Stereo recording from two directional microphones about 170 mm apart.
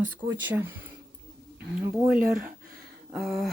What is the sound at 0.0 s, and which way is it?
Speech, 10° right (ahead or behind).